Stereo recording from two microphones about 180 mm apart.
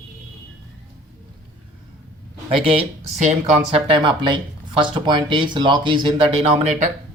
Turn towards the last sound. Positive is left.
turn(degrees=-40)  # may be behind; listen again after turning